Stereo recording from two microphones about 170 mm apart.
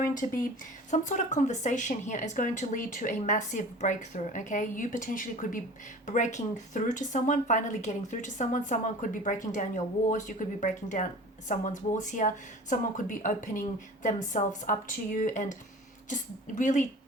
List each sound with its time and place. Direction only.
0.0 s a woman's voice: 50° left (ahead or behind)